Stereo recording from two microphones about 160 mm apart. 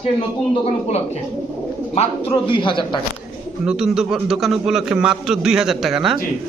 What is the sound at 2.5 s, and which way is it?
Speech, 30° left (ahead or behind).